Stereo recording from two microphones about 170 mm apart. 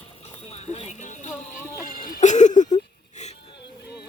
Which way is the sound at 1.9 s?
55° left (ahead or behind).